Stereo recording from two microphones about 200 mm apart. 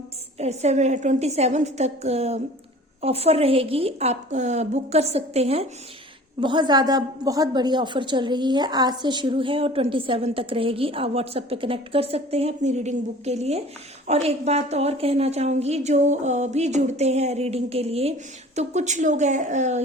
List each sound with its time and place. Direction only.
0.3 s a woman's voice: 35° right (ahead or behind)